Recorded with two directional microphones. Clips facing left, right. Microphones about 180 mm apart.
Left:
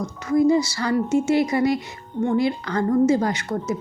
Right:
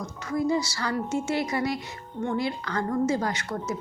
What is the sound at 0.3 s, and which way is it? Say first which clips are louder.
A woman's voice: left 8 dB; 15° left (ahead or behind).